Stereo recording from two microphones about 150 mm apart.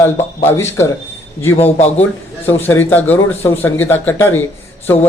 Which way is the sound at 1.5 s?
45° left (ahead or behind).